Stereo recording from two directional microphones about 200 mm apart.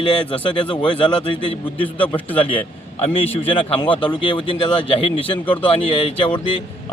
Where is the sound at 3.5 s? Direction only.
25° left (ahead or behind).